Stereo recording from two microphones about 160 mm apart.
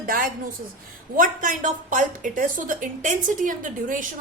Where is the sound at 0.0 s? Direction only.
60° right (ahead or behind).